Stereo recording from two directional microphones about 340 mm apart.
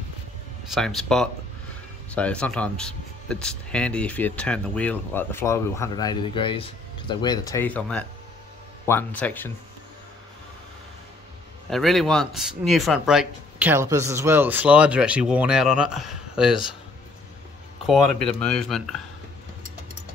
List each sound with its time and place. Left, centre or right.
0.7 s speech: centre
11.7 s speech: centre
17.8 s speech: centre